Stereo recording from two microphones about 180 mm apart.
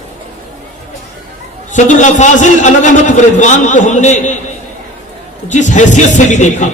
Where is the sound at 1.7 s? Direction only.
45° left (ahead or behind).